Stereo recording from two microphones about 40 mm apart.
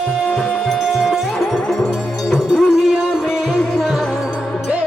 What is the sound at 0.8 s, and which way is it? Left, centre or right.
Music, centre.